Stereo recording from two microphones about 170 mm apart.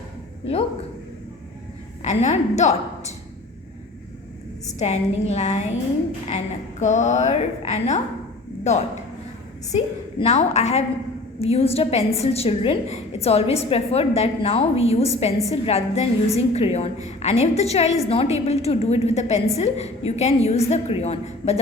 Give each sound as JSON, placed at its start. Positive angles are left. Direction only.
{"t": 2.0, "sound": "a woman's voice", "side_deg": 45}
{"t": 4.8, "sound": "a woman's voice", "side_deg": 40}